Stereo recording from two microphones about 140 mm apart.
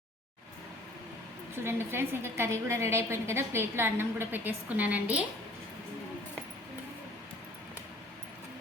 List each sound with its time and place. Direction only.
1.6 s a woman's voice: 15° right (ahead or behind)